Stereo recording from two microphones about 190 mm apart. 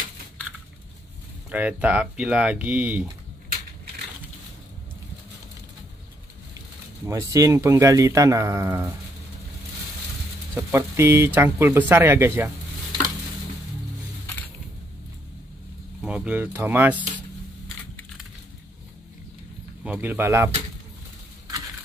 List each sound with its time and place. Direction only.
1.5 s speech: 10° right (ahead or behind)
7.1 s speech: 15° right (ahead or behind)
10.5 s speech: 15° right (ahead or behind)
16.0 s speech: 5° right (ahead or behind)
19.8 s speech: 10° right (ahead or behind)